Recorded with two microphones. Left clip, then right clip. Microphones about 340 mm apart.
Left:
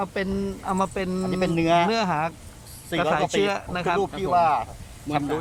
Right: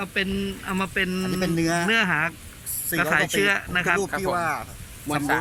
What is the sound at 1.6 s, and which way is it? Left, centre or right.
Speech, left.